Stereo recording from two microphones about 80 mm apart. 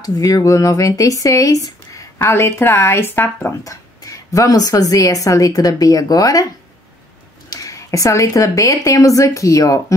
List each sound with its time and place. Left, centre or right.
0.0 s a woman's voice: left
2.2 s a woman's voice: left
3.6 s a woman's voice: left
7.4 s a woman's voice: left